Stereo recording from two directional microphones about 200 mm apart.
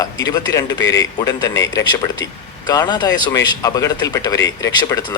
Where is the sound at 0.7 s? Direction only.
65° left (ahead or behind).